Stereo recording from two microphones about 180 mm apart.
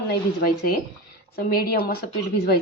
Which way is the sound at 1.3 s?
55° left (ahead or behind).